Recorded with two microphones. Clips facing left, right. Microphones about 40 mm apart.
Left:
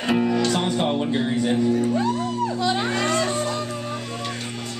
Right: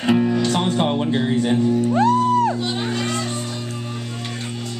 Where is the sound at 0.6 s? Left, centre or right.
Centre.